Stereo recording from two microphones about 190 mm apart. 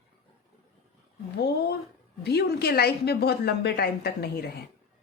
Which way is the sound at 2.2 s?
55° left (ahead or behind).